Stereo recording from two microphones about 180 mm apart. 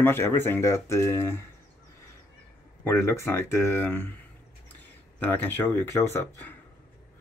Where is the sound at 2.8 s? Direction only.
15° left (ahead or behind).